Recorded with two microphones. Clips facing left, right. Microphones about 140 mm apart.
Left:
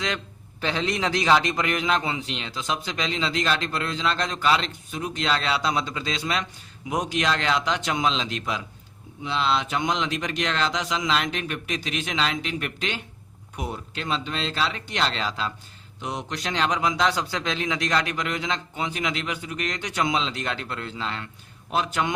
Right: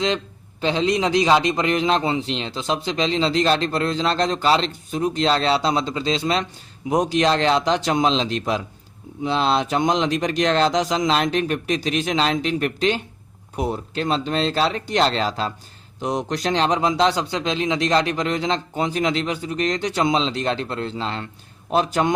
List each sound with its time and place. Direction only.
0.6 s a man's voice: 20° right (ahead or behind); by 22.1 s 40° right (ahead or behind)